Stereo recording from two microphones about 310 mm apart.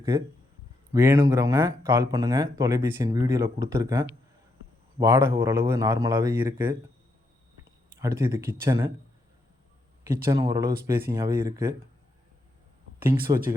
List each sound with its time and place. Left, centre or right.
0.9 s speech: centre
7.9 s speech: centre
10.2 s speech: centre
13.0 s speech: right